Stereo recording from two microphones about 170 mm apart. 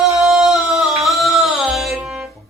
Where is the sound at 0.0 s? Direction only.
Centre (ahead or behind).